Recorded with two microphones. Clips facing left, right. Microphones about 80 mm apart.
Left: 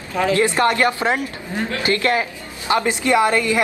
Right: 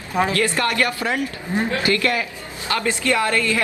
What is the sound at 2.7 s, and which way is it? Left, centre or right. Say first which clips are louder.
Speech: left 4 dB; left.